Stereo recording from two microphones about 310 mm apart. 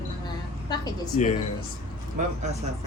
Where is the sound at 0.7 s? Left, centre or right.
Left.